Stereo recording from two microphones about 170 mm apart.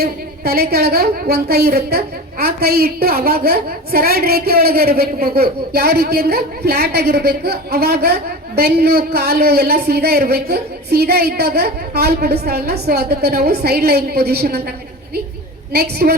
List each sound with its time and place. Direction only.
0.0 s a woman's voice: 65° right (ahead or behind)
15.7 s a woman's voice: 70° right (ahead or behind)